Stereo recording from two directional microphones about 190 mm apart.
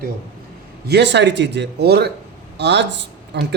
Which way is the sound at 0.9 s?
65° right (ahead or behind).